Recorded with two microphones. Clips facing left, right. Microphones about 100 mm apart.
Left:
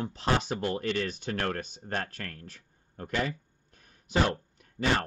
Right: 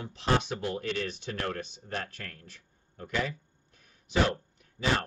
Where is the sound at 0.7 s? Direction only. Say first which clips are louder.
Left 2 dB; 50° left (ahead or behind).